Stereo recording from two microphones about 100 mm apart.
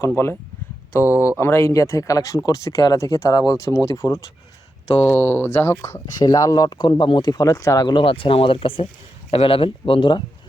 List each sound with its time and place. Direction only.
0.0 s speech: 25° left (ahead or behind)
1.4 s speech: 25° left (ahead or behind)
6.1 s speech: 40° left (ahead or behind)
7.9 s speech: 60° left (ahead or behind)